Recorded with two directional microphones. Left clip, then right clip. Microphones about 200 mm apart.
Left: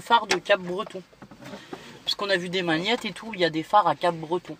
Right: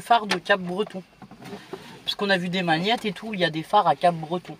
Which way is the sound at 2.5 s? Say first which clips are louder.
Right 2 dB; 10° right (ahead or behind).